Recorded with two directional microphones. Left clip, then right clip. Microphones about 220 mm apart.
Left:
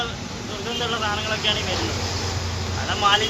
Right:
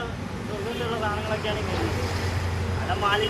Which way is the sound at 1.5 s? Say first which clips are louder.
Left 10 dB; centre (ahead or behind).